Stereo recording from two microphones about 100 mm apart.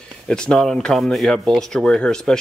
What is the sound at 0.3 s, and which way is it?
Speech, 5° left (ahead or behind).